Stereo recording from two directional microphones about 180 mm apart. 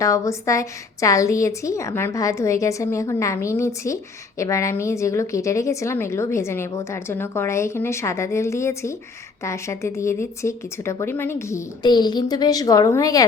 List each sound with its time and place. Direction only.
0.0 s a woman's voice: 15° left (ahead or behind)